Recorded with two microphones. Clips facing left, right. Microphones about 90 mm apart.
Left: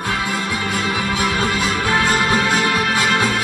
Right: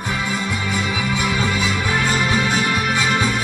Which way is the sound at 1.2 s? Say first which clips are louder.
Left 2 dB; 60° left (ahead or behind).